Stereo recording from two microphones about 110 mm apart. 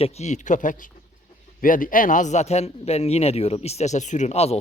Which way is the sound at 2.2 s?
90° left.